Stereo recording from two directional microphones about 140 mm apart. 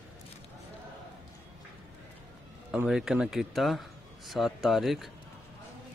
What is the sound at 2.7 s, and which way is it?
Speech, 5° right (ahead or behind).